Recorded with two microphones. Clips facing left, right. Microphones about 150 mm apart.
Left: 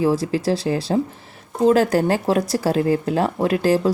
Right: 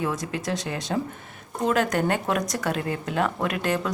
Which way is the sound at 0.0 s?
30° left (ahead or behind).